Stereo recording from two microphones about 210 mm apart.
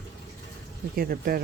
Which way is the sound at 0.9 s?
45° right (ahead or behind).